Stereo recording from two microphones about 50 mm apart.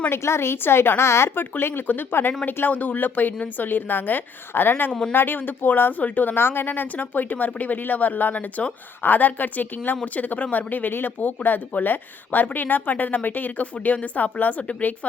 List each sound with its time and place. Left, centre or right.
0.1 s a woman's voice: left
1.4 s speech: left
4.9 s speech: centre
5.1 s speech: left
6.4 s speech: left